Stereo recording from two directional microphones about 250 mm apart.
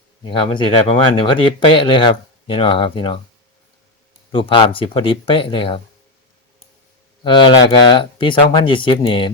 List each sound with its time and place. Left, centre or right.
0.3 s speech: left
4.3 s speech: centre
7.3 s speech: centre